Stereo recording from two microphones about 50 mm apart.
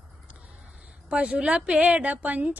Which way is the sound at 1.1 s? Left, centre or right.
Right.